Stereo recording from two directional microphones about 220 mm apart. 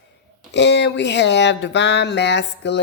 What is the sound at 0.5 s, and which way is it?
A woman's voice, 50° left (ahead or behind).